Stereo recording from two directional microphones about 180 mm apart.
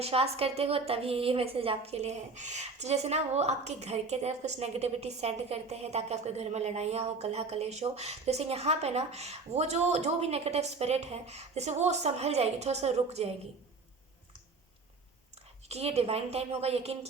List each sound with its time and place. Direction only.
0.0 s a woman's voice: 35° right (ahead or behind)
15.7 s a woman's voice: 35° right (ahead or behind)